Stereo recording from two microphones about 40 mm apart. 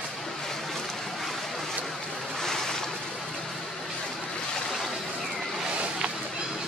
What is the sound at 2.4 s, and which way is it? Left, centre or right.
Boat, centre.